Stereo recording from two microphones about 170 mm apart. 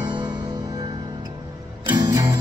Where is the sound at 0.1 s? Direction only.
25° right (ahead or behind).